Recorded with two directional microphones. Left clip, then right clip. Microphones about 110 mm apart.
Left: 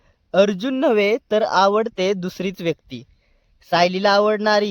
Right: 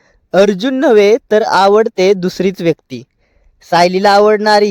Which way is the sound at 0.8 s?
55° right (ahead or behind).